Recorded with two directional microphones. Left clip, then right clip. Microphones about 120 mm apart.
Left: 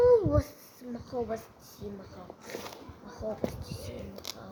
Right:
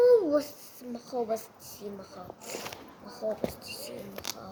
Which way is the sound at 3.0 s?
5° left (ahead or behind).